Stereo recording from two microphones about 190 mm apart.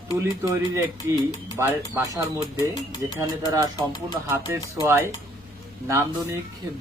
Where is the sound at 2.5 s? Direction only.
20° left (ahead or behind).